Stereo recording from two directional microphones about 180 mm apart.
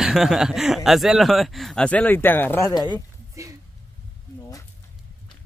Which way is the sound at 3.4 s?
15° right (ahead or behind).